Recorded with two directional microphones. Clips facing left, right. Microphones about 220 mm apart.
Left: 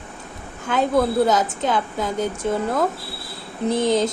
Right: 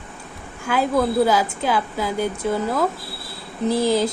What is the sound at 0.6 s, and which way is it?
Speech, 5° right (ahead or behind).